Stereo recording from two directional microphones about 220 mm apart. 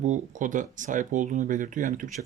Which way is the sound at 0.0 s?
35° right (ahead or behind).